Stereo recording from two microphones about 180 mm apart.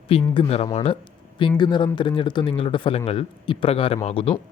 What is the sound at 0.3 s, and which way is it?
A man's voice, 35° left (ahead or behind).